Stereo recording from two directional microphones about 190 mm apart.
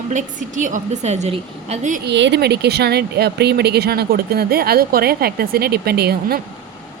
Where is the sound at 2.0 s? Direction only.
65° right (ahead or behind).